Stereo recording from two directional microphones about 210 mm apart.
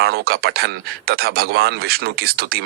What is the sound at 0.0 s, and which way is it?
A man's voice, 45° right (ahead or behind).